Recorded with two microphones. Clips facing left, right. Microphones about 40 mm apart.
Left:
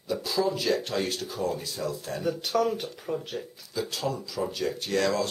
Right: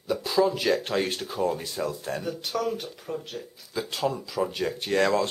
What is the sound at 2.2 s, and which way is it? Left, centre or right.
Speech, centre.